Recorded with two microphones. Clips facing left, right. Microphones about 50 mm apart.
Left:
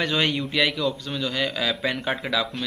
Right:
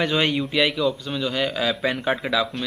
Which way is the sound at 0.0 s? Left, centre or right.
Centre.